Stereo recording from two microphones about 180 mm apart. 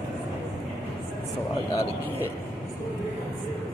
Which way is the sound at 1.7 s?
20° left (ahead or behind).